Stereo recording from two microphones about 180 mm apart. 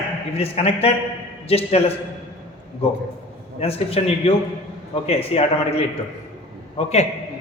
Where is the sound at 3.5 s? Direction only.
35° left (ahead or behind).